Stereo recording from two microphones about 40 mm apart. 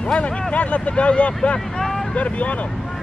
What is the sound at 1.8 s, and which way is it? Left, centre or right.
Vehicle, centre.